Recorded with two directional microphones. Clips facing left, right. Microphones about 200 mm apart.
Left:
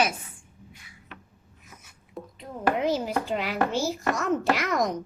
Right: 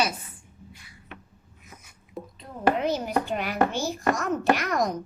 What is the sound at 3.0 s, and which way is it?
Speech, 85° left.